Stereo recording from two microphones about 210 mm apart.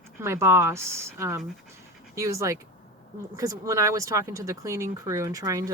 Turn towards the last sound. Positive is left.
turn(degrees=-15)  # may be behind; listen again after turning